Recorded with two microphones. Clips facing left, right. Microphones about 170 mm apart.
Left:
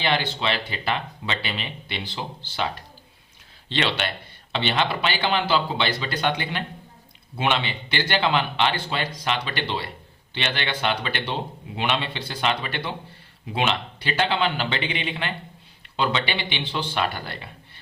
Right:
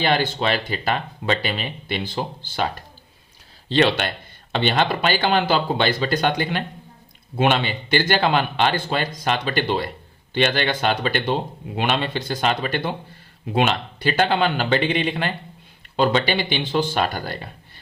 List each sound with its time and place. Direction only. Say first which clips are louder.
0.0 s speech: right 4 dB; 45° right (ahead or behind)
3.7 s speech: right 7 dB; 45° right (ahead or behind)